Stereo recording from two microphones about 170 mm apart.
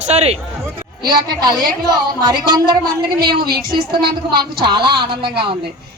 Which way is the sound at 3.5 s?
25° right (ahead or behind).